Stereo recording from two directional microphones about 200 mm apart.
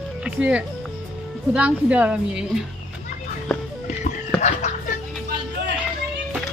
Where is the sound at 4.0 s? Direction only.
35° left (ahead or behind).